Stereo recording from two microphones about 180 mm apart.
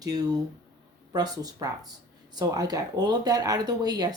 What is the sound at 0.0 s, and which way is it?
Speech, 20° right (ahead or behind).